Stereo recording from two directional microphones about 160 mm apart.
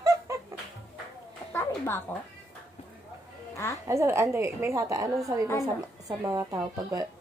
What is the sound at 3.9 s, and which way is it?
A woman's voice, 15° right (ahead or behind).